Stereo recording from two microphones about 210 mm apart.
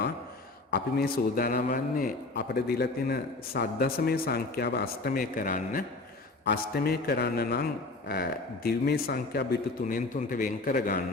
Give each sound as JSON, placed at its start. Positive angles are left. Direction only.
{"t": 0.7, "sound": "a man's voice", "side_deg": 45}